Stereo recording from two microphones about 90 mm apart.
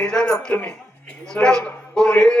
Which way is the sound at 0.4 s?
10° left (ahead or behind).